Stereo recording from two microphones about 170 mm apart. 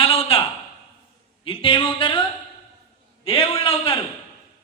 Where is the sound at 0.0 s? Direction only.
35° left (ahead or behind).